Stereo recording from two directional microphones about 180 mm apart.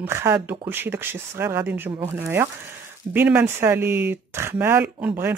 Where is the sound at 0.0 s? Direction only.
15° right (ahead or behind).